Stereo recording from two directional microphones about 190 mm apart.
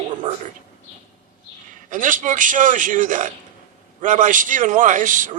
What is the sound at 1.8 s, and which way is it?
A man's voice, 45° right (ahead or behind).